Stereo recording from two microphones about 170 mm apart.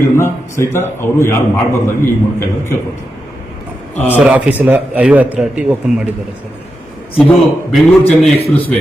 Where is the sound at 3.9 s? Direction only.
10° left (ahead or behind).